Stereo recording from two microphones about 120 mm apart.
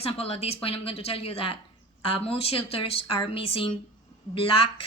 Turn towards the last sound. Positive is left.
turn(degrees=50)  # may be behind; listen again after turning